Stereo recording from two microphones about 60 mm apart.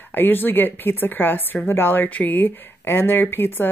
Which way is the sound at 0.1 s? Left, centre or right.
Left.